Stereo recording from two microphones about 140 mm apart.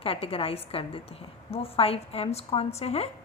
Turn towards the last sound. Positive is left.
turn(degrees=45)  # may be behind; listen again after turning